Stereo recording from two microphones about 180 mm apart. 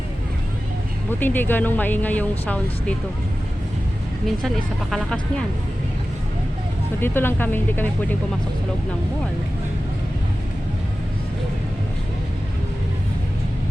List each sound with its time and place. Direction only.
1.2 s speech: 10° left (ahead or behind)
4.3 s speech: centre (ahead or behind)
7.0 s speech: 10° left (ahead or behind)